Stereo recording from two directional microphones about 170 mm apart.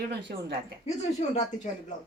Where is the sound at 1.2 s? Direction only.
45° left (ahead or behind).